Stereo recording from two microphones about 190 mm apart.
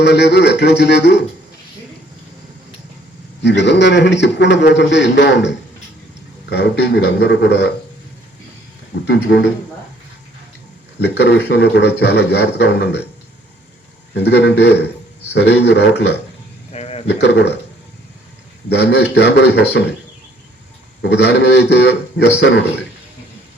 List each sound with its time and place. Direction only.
0.0 s speech: 65° left (ahead or behind)
3.4 s a man's voice: 65° left (ahead or behind)
9.0 s speech: 65° left (ahead or behind)
11.0 s speech: 65° left (ahead or behind)
14.1 s speech: 65° left (ahead or behind)
16.7 s a sound: 35° left (ahead or behind)
17.2 s speech: 65° left (ahead or behind)
18.7 s speech: 60° left (ahead or behind)
21.0 s speech: 65° left (ahead or behind)